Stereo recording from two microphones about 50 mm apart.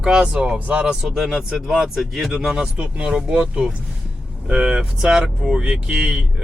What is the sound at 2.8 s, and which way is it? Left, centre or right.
Speech, right.